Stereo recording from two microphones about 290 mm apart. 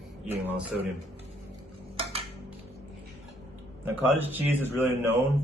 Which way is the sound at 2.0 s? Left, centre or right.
Centre.